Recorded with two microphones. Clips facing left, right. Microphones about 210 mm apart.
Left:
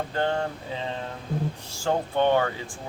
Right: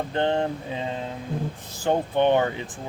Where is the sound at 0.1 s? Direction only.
20° right (ahead or behind).